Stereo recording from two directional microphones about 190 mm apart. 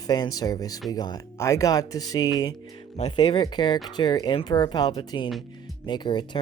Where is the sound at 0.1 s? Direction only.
20° left (ahead or behind).